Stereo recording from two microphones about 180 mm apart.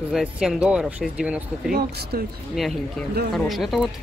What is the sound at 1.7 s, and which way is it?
Speech, 65° right (ahead or behind).